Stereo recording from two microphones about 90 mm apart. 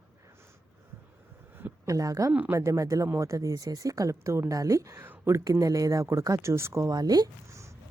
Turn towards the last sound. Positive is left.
turn(degrees=-45)  # may be behind; listen again after turning